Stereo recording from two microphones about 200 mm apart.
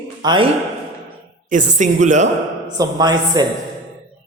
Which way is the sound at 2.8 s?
20° right (ahead or behind).